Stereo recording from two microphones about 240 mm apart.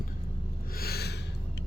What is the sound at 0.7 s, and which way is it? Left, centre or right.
Gasp, left.